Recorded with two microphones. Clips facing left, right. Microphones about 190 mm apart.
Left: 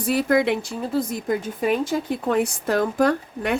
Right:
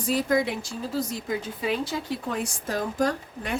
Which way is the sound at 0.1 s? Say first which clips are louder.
Left 5 dB; 65° left (ahead or behind).